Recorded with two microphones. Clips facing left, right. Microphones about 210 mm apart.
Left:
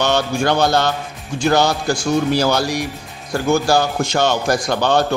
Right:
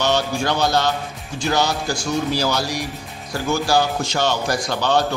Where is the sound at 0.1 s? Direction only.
55° left (ahead or behind).